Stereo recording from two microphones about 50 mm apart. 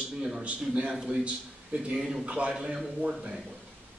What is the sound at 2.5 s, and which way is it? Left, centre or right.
Speech, centre.